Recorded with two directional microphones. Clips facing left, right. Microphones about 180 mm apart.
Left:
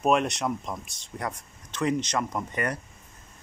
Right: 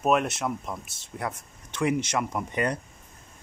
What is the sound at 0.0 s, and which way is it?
Speech, 5° right (ahead or behind).